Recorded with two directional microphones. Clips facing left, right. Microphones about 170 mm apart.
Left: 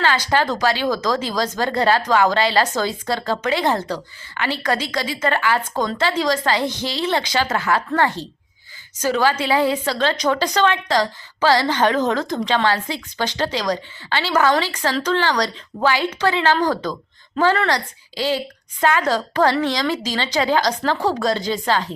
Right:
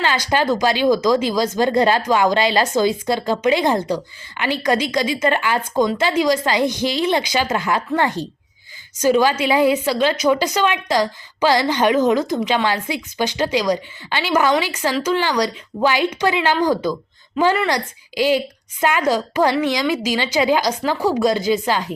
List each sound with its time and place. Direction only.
0.0 s a woman's voice: 15° right (ahead or behind)